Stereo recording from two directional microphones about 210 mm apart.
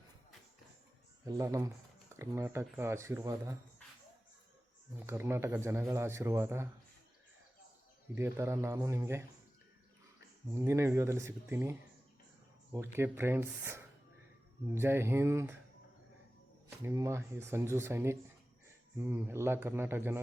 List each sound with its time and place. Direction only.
1.2 s speech: 15° right (ahead or behind)
4.9 s speech: 10° right (ahead or behind)
8.1 s speech: 10° right (ahead or behind)
10.5 s speech: 10° right (ahead or behind)
16.6 s speech: 15° right (ahead or behind)